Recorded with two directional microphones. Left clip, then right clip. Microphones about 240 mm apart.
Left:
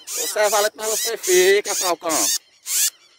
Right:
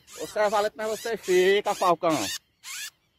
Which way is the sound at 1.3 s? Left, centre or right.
Right.